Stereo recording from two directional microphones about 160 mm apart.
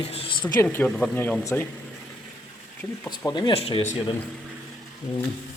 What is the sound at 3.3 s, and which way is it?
Speech, 35° left (ahead or behind).